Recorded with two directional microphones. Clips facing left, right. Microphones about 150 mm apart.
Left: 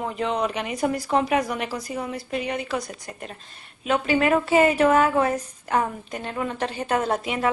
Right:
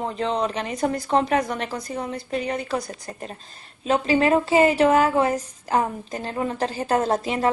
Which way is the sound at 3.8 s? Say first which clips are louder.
Right 2 dB; 30° right (ahead or behind).